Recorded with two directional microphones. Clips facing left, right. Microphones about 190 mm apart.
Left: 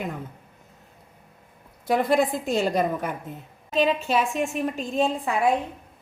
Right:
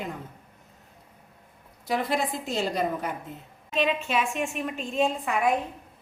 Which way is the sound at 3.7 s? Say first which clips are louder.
Left 4 dB; 35° left (ahead or behind).